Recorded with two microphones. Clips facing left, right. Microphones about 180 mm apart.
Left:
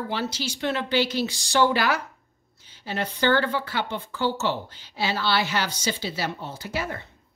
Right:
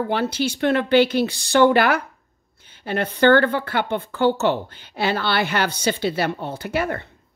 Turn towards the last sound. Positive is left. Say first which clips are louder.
# right 7 dB
turn(degrees=-60)  # may be behind; listen again after turning